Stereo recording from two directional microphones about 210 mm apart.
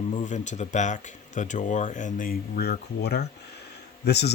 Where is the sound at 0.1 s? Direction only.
35° left (ahead or behind).